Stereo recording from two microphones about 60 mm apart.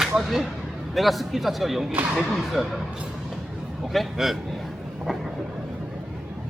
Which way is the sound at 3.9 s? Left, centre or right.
Centre.